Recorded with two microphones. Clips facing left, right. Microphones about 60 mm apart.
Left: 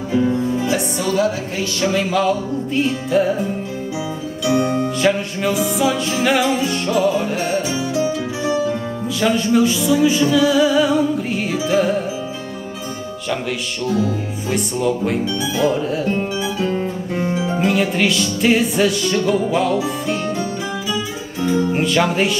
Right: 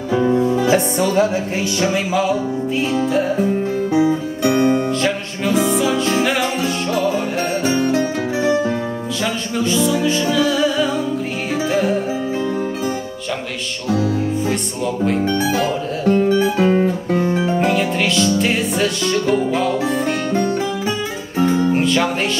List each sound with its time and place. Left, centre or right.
0.7 s music: right
1.8 s music: centre
2.8 s music: centre
3.9 s guitar: right
5.7 s music: centre
7.6 s music: right
9.2 s music: centre
15.2 s speech: right
16.3 s music: right
17.6 s music: centre
21.7 s music: centre